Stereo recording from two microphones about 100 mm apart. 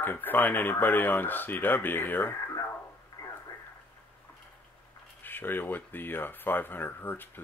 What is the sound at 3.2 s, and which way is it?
Radio, 35° left (ahead or behind).